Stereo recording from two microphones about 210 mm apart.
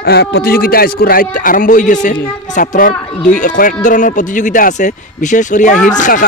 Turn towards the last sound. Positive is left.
turn(degrees=35)  # may be behind; listen again after turning